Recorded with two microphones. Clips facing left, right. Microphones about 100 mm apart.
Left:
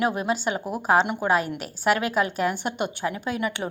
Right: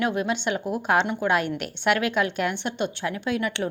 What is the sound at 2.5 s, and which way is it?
A woman's voice, 10° left (ahead or behind).